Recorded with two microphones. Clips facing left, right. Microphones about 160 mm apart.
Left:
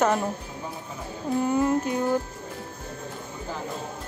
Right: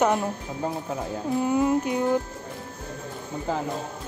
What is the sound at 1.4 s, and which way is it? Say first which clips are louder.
Speech: right 1 dB; 10° right (ahead or behind).